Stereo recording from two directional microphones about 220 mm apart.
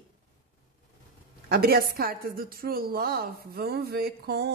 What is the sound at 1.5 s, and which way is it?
A woman's voice, 45° right (ahead or behind).